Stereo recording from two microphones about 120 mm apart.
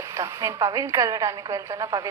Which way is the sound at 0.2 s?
25° right (ahead or behind).